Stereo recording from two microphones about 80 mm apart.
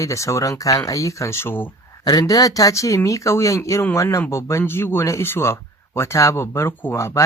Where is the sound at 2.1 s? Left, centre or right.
Left.